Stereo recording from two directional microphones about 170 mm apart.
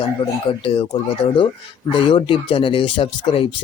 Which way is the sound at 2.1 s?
30° left (ahead or behind).